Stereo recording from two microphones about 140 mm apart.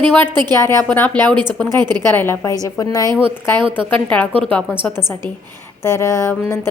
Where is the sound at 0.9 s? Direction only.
15° left (ahead or behind).